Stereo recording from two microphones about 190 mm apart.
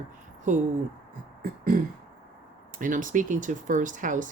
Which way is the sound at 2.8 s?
45° right (ahead or behind).